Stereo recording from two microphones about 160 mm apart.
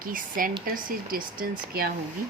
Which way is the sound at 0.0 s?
60° right (ahead or behind).